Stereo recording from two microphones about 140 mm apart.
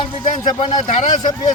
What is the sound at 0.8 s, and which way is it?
Speech, 55° left (ahead or behind).